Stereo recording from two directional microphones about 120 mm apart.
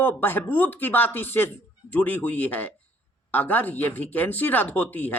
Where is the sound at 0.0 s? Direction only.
15° left (ahead or behind).